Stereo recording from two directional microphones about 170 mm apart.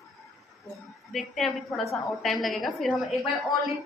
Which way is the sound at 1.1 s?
Centre (ahead or behind).